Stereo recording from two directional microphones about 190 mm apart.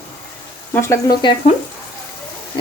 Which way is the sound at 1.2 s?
25° left (ahead or behind).